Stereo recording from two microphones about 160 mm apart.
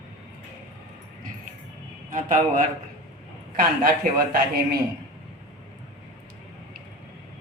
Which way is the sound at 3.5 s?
65° right (ahead or behind).